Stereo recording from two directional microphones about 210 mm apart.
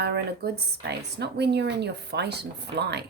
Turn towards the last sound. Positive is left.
turn(degrees=-50)  # may be behind; listen again after turning